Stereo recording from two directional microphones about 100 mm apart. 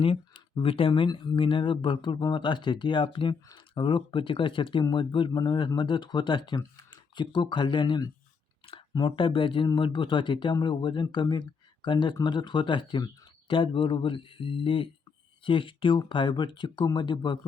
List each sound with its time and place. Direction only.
0.0 s speech: 65° left (ahead or behind)